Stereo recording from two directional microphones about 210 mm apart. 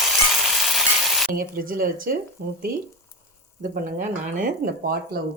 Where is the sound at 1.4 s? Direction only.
40° right (ahead or behind).